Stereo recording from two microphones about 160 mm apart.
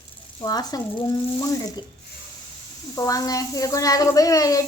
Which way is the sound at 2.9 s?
20° left (ahead or behind).